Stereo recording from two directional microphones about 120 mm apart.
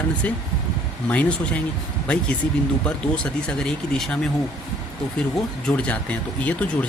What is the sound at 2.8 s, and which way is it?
Speech, 10° left (ahead or behind).